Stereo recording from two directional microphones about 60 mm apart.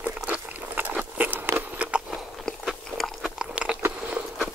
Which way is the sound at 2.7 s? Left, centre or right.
Centre.